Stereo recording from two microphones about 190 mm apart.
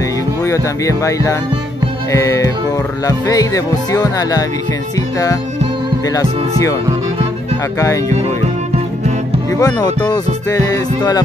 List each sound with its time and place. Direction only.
0.5 s music: 15° left (ahead or behind)
9.6 s music: 20° left (ahead or behind)